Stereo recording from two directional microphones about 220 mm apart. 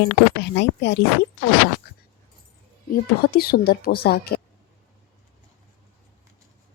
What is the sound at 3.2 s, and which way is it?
A woman's voice, 45° left (ahead or behind).